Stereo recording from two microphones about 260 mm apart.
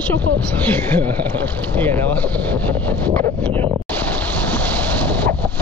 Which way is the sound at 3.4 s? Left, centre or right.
Right.